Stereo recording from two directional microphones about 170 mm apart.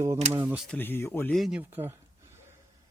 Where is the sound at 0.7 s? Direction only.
10° left (ahead or behind).